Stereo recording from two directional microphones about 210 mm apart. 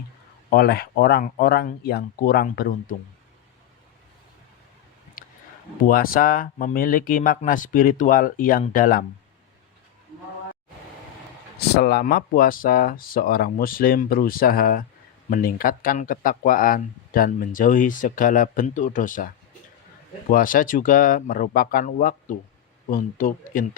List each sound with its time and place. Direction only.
0.5 s speech: 45° left (ahead or behind)
5.9 s speech: 45° left (ahead or behind)
11.8 s speech: 50° left (ahead or behind)
20.3 s speech: 40° left (ahead or behind)